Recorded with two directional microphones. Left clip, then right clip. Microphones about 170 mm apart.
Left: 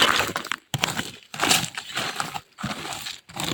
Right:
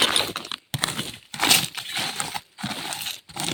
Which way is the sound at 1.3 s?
15° left (ahead or behind).